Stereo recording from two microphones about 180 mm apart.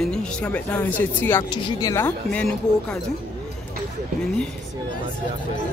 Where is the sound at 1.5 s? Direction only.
20° left (ahead or behind).